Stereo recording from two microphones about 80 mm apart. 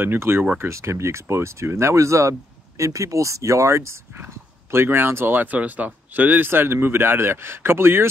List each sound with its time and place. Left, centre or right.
0.0 s speech: right